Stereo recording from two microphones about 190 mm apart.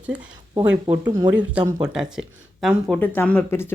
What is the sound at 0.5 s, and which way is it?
Speech, 20° right (ahead or behind).